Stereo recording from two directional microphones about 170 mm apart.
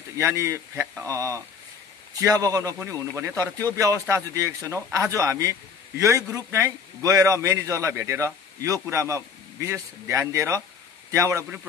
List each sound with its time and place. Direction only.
0.2 s speech: 15° right (ahead or behind)